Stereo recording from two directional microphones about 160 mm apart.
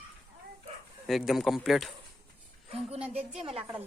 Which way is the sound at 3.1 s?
35° right (ahead or behind).